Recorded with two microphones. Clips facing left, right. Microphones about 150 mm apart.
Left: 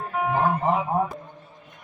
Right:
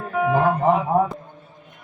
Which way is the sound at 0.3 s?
90° right.